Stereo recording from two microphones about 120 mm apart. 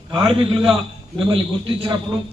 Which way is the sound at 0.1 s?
50° right (ahead or behind).